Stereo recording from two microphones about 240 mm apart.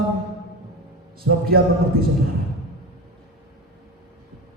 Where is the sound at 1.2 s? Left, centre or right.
Right.